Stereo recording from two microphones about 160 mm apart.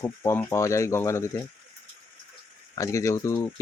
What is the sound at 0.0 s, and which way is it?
Speech, 10° left (ahead or behind).